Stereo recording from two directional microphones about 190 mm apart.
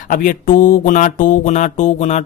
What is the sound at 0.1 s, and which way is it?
Music, 45° left (ahead or behind).